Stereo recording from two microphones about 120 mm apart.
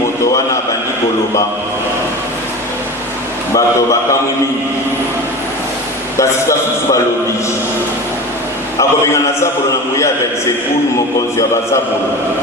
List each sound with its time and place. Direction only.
3.5 s a man's voice: 25° left (ahead or behind)
6.1 s a man's voice: 25° left (ahead or behind)
8.8 s a man's voice: 25° left (ahead or behind)